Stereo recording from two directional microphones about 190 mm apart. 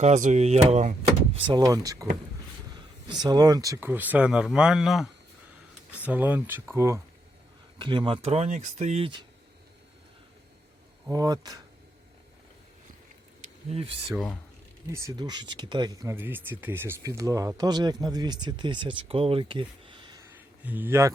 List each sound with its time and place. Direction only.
0.0 s speech: 40° right (ahead or behind)
1.4 s speech: 20° right (ahead or behind)
3.1 s speech: 20° right (ahead or behind)
11.1 s speech: 20° right (ahead or behind)
13.4 s a sound: 30° right (ahead or behind)
14.1 s speech: centre (ahead or behind)
14.9 s speech: 20° right (ahead or behind)
20.7 s speech: 10° right (ahead or behind)